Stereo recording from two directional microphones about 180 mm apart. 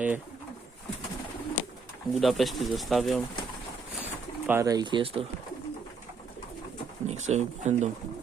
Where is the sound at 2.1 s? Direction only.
Centre (ahead or behind).